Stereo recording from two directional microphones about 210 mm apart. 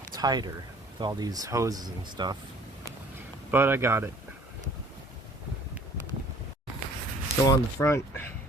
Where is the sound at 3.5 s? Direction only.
10° right (ahead or behind).